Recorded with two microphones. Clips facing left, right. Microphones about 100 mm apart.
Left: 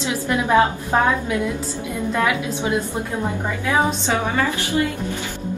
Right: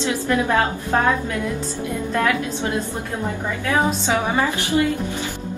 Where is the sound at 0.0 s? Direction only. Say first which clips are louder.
Right 1 dB; 15° left (ahead or behind).